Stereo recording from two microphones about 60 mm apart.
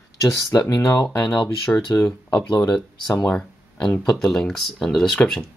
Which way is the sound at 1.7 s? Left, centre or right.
Left.